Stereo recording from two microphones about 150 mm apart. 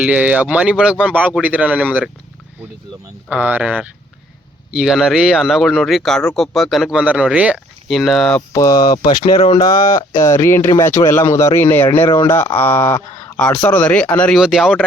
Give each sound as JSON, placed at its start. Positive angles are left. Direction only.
{"t": 0.0, "sound": "speech", "side_deg": -10}
{"t": 3.2, "sound": "speech", "side_deg": -10}
{"t": 8.4, "sound": "a sound", "side_deg": 20}
{"t": 9.2, "sound": "speech", "side_deg": 40}
{"t": 9.6, "sound": "a sound", "side_deg": 25}
{"t": 10.2, "sound": "speech", "side_deg": 20}